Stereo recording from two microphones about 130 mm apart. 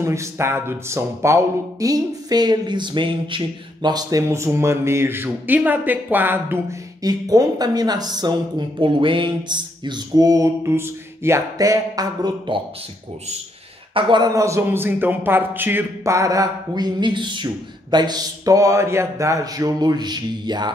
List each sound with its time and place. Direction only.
0.0 s speech: 20° right (ahead or behind)
7.0 s speech: 30° right (ahead or behind)
13.9 s speech: 40° right (ahead or behind)